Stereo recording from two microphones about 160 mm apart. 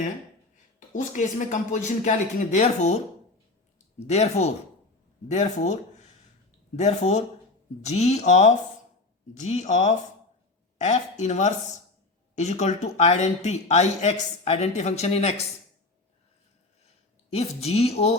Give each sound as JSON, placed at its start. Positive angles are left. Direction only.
{"t": 0.9, "sound": "speech", "side_deg": 50}
{"t": 4.0, "sound": "speech", "side_deg": 45}
{"t": 6.7, "sound": "speech", "side_deg": 45}
{"t": 17.2, "sound": "a woman's voice", "side_deg": 40}